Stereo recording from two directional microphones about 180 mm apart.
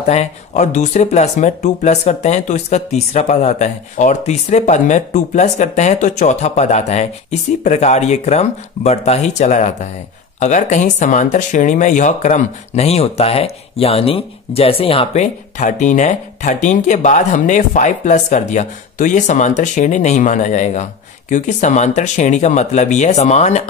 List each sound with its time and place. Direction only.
0.0 s speech: 40° left (ahead or behind)